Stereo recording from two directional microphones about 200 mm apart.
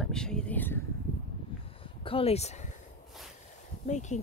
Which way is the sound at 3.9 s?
35° left (ahead or behind).